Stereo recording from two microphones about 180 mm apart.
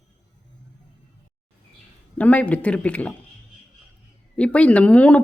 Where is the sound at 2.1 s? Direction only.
10° left (ahead or behind).